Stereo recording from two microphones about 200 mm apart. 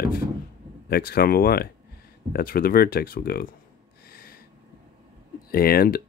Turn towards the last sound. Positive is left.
turn(degrees=50)  # may be behind; listen again after turning